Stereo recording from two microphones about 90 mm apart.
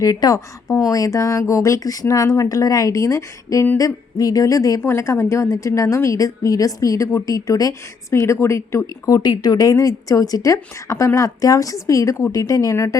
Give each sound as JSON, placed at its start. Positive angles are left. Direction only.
{"t": 0.0, "sound": "a woman's voice", "side_deg": 40}
{"t": 4.8, "sound": "a woman's voice", "side_deg": 30}